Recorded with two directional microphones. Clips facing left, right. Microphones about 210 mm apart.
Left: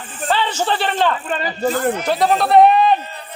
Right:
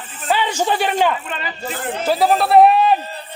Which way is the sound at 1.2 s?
40° left (ahead or behind).